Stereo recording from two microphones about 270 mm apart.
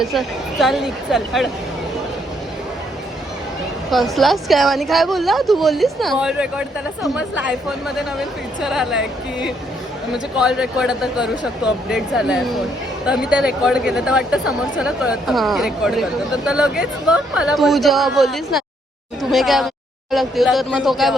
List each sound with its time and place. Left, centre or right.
0.0 s a woman's voice: centre
3.9 s a woman's voice: centre